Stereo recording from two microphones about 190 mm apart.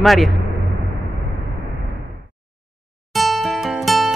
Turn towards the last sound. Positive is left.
turn(degrees=0)  # may be behind; listen again after turning